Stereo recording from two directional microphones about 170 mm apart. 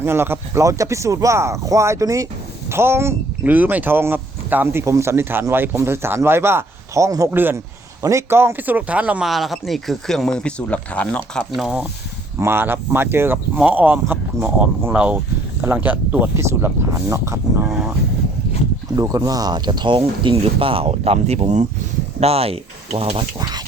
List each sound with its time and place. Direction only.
0.0 s speech: 15° right (ahead or behind)
18.9 s speech: 20° right (ahead or behind); by 23.2 s 35° right (ahead or behind)
23.4 s speech: 25° right (ahead or behind)